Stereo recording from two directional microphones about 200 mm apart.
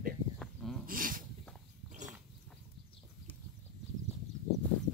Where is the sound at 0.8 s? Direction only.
45° right (ahead or behind).